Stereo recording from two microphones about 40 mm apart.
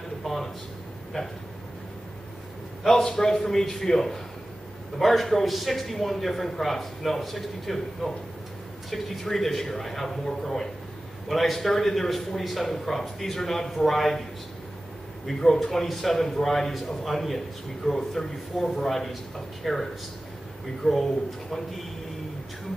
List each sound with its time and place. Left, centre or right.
0.2 s a sound: centre
1.1 s speech: left
2.8 s a man's voice: centre
15.2 s a man's voice: centre